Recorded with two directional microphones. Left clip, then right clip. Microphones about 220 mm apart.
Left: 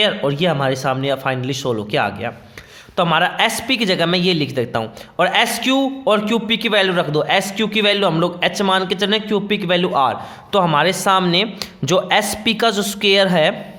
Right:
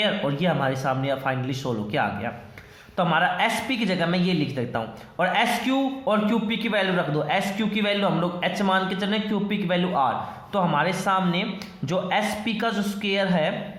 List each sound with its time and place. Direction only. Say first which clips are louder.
0.0 s a man's voice: left 7 dB; 45° left (ahead or behind)